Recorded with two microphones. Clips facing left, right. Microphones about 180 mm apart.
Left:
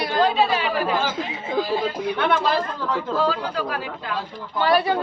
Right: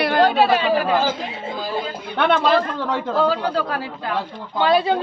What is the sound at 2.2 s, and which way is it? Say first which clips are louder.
Speech: right 6 dB; 70° right (ahead or behind).